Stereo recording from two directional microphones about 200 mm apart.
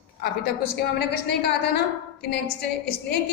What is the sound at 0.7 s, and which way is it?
Speech, 55° left (ahead or behind).